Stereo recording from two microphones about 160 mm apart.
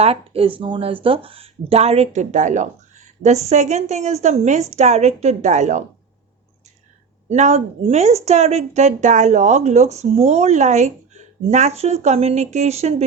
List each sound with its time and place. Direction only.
0.0 s a woman's voice: 40° right (ahead or behind)
7.3 s speech: 45° right (ahead or behind)